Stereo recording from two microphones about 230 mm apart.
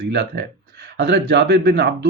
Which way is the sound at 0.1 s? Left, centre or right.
Right.